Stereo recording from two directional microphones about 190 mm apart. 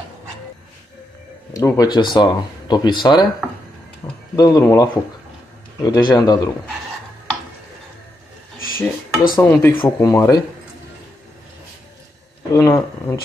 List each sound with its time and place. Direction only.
1.5 s speech: 20° left (ahead or behind)
4.0 s a sound: 15° left (ahead or behind)
4.4 s speech: 20° left (ahead or behind)
8.5 s cutlery: 50° left (ahead or behind)
9.3 s speech: 10° left (ahead or behind)
12.5 s speech: 15° left (ahead or behind)